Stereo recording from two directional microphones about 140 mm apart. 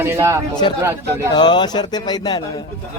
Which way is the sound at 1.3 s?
35° left (ahead or behind).